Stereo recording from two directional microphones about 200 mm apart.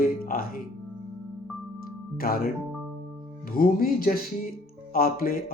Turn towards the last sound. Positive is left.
turn(degrees=45)  # may be behind; listen again after turning